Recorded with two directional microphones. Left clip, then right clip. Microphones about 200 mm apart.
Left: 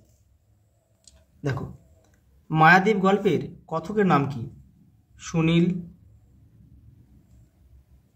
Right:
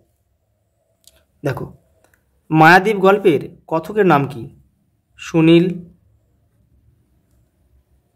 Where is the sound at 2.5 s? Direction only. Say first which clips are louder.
Right 7 dB; 55° right (ahead or behind).